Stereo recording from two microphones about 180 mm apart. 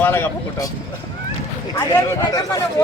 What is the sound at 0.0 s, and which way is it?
Speech, 15° left (ahead or behind).